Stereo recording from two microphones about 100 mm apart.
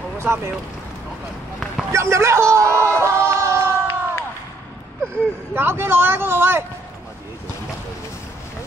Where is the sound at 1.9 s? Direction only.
30° right (ahead or behind).